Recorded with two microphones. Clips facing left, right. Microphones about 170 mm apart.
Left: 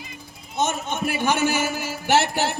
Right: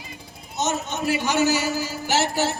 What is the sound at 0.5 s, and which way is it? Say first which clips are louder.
A man's voice: left 1 dB; 55° left (ahead or behind).